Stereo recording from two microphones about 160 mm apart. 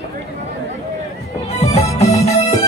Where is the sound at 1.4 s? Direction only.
40° left (ahead or behind).